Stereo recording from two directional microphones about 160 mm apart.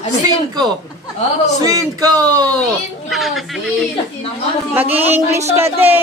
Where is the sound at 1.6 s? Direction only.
20° right (ahead or behind).